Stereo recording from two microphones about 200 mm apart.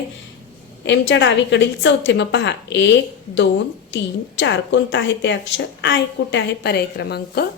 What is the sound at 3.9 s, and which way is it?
A woman's voice, 65° left (ahead or behind).